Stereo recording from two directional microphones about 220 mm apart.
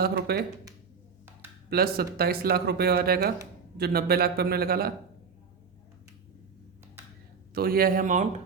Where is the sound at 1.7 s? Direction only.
45° right (ahead or behind).